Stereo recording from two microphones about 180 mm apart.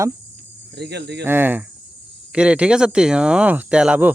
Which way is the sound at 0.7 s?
70° right (ahead or behind).